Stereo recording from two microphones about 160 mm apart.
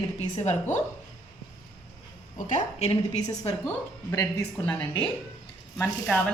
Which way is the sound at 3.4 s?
20° left (ahead or behind).